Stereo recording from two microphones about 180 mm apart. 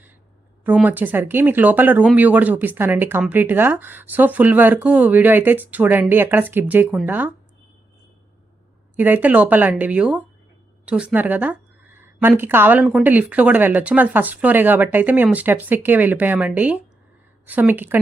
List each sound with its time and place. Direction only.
0.6 s speech: 10° right (ahead or behind)
9.0 s speech: 10° right (ahead or behind)